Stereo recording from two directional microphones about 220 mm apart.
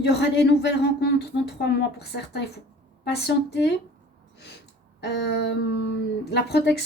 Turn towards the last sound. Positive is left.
turn(degrees=50)  # may be behind; listen again after turning